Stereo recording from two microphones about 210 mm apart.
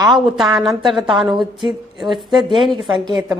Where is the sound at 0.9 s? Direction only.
20° right (ahead or behind).